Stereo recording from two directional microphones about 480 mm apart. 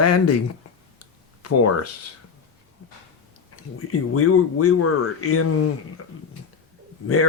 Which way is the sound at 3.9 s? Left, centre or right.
Left.